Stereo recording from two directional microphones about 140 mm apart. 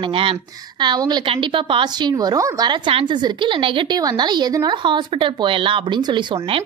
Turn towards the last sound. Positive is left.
turn(degrees=-35)  # may be behind; listen again after turning